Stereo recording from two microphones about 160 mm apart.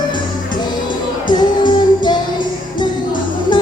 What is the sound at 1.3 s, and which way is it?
Music, 25° left (ahead or behind).